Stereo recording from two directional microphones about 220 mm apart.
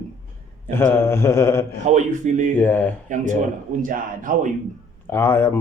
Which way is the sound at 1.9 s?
35° right (ahead or behind).